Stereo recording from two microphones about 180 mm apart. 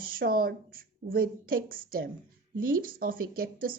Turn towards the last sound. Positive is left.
turn(degrees=-55)  # may be behind; listen again after turning